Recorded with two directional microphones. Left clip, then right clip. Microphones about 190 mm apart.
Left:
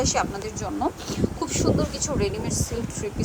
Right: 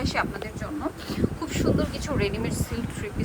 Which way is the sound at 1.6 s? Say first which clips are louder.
Left 2 dB; 20° left (ahead or behind).